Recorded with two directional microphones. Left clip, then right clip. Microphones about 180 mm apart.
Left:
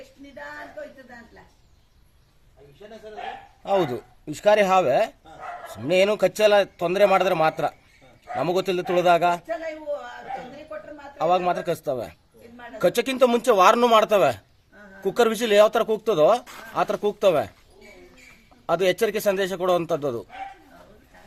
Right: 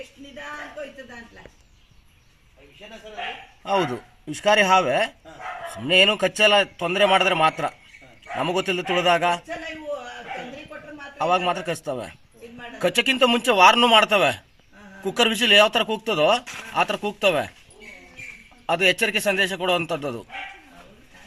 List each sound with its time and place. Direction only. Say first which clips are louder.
4.4 s a man's voice: right 1 dB; 20° left (ahead or behind)
11.2 s a man's voice: even; 20° left (ahead or behind)
18.6 s a man's voice: right 1 dB; 20° left (ahead or behind)